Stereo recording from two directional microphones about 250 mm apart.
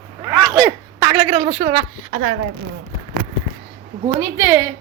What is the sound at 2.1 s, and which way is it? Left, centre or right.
Speech, right.